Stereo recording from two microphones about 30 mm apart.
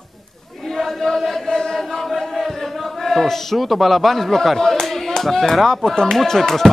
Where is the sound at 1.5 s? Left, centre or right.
Centre.